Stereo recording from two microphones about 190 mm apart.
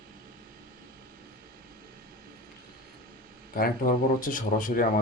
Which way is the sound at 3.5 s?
45° left (ahead or behind).